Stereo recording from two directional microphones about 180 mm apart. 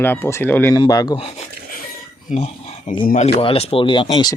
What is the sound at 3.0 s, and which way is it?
Speech, 45° left (ahead or behind).